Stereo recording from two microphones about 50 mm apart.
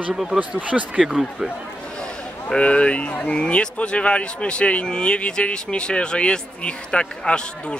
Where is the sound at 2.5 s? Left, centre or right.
Left.